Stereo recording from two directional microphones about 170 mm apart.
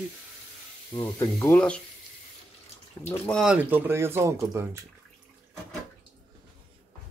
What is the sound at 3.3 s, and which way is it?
Speech, centre (ahead or behind).